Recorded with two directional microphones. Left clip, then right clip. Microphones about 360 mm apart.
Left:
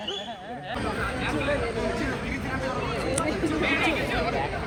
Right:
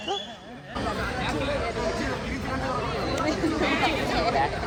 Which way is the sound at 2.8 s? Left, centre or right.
Right.